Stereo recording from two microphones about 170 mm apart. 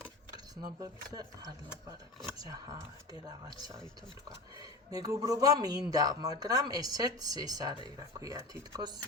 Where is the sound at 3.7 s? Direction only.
5° left (ahead or behind).